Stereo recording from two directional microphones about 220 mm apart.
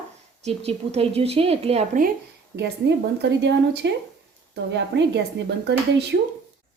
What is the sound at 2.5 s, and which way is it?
A woman's voice, 50° right (ahead or behind).